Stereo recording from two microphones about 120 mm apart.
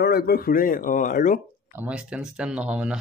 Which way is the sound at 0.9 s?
90° left.